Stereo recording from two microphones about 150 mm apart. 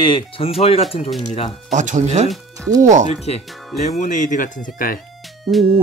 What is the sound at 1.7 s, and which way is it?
Speech, 55° right (ahead or behind).